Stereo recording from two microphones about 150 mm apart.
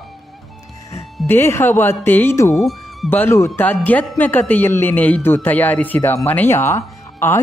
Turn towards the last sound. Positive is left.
turn(degrees=15)  # may be behind; listen again after turning